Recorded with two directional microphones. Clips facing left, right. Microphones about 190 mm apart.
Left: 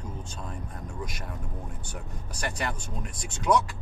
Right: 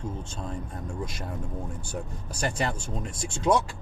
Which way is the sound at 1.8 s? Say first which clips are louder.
Right 5 dB; 30° right (ahead or behind).